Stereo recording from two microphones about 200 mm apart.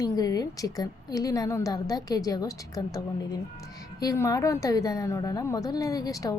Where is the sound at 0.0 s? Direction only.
20° left (ahead or behind).